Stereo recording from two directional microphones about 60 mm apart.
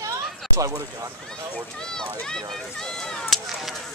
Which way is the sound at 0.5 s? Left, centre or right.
Right.